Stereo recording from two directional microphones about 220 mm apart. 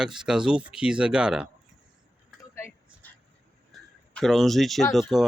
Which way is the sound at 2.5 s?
10° left (ahead or behind).